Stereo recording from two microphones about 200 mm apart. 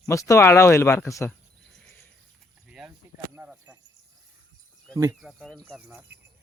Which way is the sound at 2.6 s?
5° right (ahead or behind).